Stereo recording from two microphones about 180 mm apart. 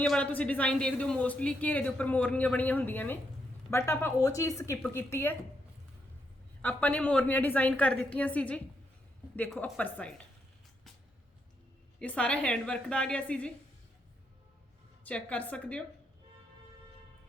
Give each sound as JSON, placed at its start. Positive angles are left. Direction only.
{"t": 0.0, "sound": "a man's voice", "side_deg": 5}
{"t": 6.6, "sound": "a man's voice", "side_deg": 10}
{"t": 11.9, "sound": "a woman's voice", "side_deg": 5}
{"t": 15.0, "sound": "a man's voice", "side_deg": 10}